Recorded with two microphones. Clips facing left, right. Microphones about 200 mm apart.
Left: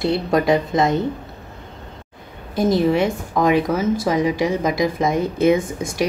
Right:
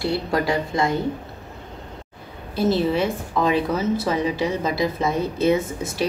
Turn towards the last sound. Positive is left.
turn(degrees=15)  # may be behind; listen again after turning